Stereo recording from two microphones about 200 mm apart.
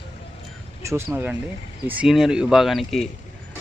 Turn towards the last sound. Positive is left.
turn(degrees=0)  # may be behind; listen again after turning